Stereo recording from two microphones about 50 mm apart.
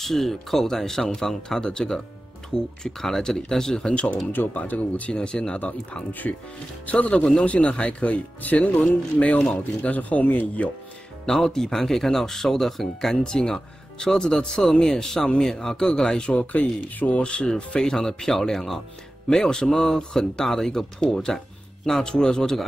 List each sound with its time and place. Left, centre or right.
0.0 s speech: centre
3.9 s speech: left
4.3 s speech: left
5.1 s speech: centre
6.2 s speech: left
11.2 s speech: centre